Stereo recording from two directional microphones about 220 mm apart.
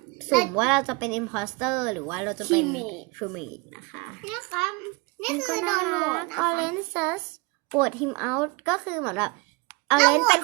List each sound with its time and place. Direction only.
0.3 s a woman's voice: centre (ahead or behind)